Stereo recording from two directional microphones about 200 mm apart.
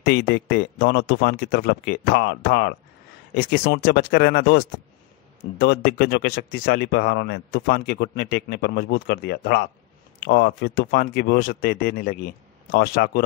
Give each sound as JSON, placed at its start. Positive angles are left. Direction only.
{"t": 0.0, "sound": "speech", "side_deg": 50}